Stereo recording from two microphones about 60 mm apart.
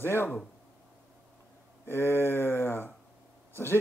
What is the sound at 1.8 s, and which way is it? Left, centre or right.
Speech, left.